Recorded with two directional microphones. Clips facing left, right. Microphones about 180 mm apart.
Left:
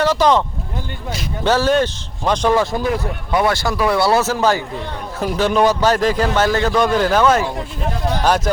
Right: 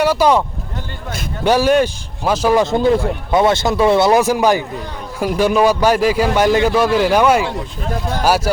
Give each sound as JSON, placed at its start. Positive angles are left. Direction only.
{"t": 0.0, "sound": "speech", "side_deg": -10}
{"t": 1.5, "sound": "a man's voice", "side_deg": -15}
{"t": 2.6, "sound": "a man's voice", "side_deg": -20}